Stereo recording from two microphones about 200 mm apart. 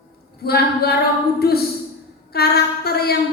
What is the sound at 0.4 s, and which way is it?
A woman's voice, 50° left (ahead or behind).